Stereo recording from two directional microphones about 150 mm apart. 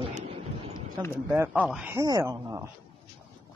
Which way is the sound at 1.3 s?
15° right (ahead or behind).